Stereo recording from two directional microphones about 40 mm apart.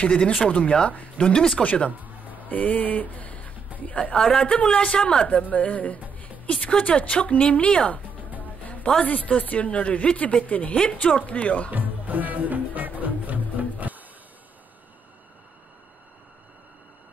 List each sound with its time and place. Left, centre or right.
0.0 s speech: left
1.6 s speech: left
4.6 s a woman's voice: left
9.0 s speech: left
11.7 s speech: right